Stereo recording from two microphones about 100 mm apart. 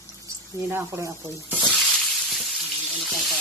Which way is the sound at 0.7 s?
25° right (ahead or behind).